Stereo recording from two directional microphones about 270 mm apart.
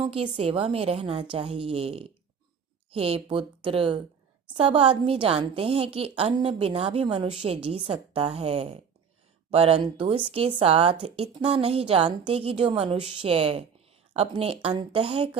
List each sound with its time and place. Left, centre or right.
0.0 s a woman's voice: right